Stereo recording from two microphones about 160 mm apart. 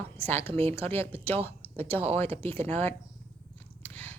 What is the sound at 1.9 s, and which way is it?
Speech, 35° right (ahead or behind).